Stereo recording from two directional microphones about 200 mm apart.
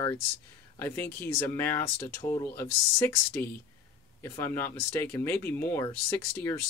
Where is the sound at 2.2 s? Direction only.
25° left (ahead or behind).